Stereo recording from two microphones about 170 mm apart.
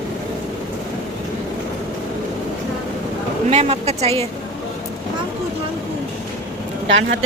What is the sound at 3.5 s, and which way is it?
Speech, 40° right (ahead or behind).